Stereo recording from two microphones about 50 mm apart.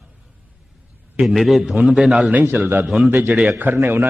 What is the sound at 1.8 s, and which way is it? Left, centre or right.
Speech, centre.